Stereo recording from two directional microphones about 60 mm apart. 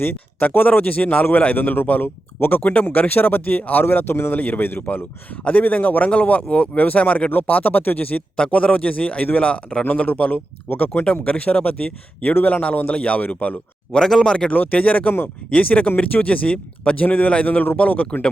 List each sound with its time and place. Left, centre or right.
0.0 s a man's voice: left
4.4 s a man's voice: left
8.4 s a man's voice: centre
13.9 s speech: centre
14.5 s a man's voice: left